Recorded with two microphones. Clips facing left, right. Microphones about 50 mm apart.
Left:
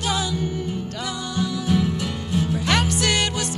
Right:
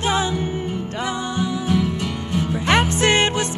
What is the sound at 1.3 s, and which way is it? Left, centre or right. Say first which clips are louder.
Music: even; right.